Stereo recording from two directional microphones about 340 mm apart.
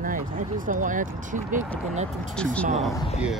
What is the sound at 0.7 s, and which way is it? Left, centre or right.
Speech, right.